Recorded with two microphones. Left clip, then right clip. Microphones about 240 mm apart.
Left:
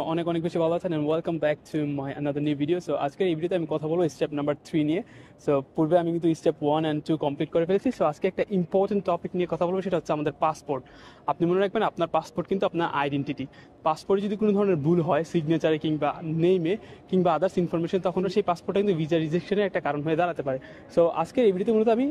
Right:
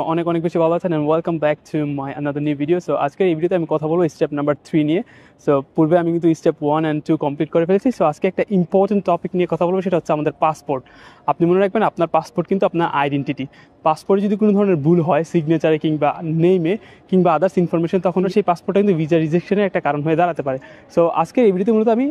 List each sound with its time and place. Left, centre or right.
0.0 s speech: right